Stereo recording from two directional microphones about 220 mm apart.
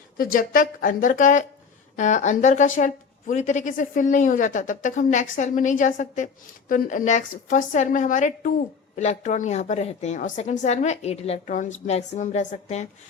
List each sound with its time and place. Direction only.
0.2 s a woman's voice: 40° left (ahead or behind)